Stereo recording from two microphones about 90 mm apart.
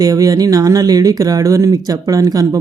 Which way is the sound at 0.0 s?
45° right (ahead or behind).